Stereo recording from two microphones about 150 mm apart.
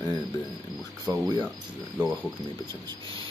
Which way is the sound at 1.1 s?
20° right (ahead or behind).